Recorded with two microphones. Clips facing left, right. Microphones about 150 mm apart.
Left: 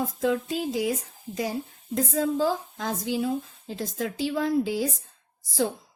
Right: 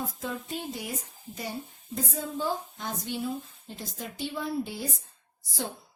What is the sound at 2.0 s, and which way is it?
Speech, 90° left.